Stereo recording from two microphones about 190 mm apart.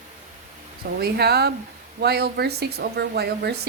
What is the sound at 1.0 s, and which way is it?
Speech, 55° right (ahead or behind).